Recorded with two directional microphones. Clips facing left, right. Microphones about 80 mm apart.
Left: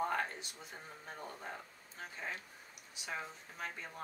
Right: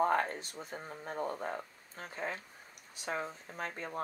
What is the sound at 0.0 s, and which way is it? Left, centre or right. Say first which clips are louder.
Speech: right 6 dB; right.